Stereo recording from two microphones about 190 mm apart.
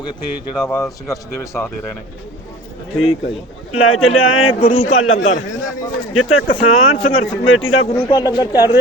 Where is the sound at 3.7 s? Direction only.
90° left.